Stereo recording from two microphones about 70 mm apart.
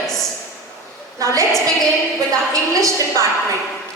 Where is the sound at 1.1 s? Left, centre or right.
Right.